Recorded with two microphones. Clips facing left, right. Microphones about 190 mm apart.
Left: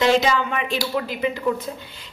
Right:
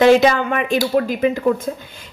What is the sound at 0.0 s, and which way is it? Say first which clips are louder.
A woman's voice: right 6 dB; 55° right (ahead or behind).